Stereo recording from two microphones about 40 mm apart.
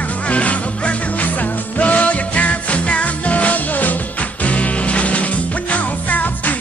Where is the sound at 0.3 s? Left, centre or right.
Left.